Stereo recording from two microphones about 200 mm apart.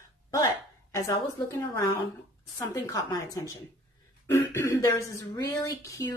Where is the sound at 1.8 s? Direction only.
15° left (ahead or behind).